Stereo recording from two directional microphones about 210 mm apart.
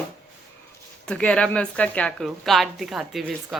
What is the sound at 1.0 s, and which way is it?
Speech, 5° left (ahead or behind).